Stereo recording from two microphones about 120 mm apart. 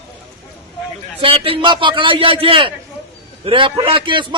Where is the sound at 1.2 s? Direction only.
50° right (ahead or behind).